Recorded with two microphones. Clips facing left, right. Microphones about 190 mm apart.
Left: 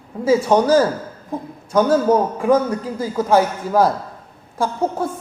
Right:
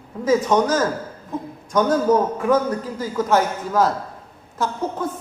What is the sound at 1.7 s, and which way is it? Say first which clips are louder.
A man's voice: left 2 dB; 10° left (ahead or behind).